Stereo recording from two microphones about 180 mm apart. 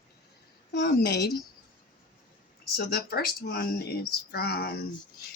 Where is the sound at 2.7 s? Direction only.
60° left (ahead or behind).